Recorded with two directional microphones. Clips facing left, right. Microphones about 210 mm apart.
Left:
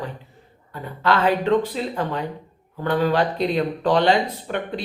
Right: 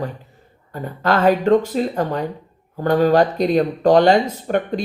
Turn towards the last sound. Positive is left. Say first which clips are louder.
# right 6 dB
turn(degrees=-45)  # may be behind; listen again after turning